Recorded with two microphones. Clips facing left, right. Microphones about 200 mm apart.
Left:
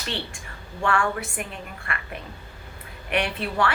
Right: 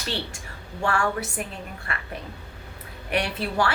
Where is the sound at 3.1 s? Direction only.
35° right (ahead or behind).